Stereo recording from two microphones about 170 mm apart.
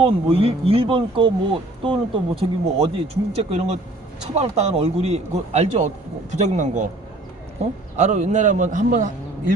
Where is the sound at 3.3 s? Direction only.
40° right (ahead or behind).